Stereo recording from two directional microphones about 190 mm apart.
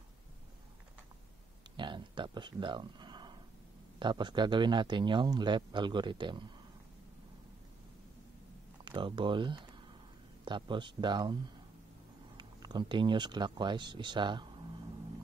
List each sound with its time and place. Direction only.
1.8 s a sound: 25° right (ahead or behind)
4.0 s speech: 25° right (ahead or behind)
8.8 s speech: 25° right (ahead or behind)
12.4 s speech: 25° right (ahead or behind)